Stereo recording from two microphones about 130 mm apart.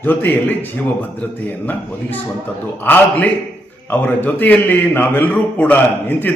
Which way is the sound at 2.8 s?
15° left (ahead or behind).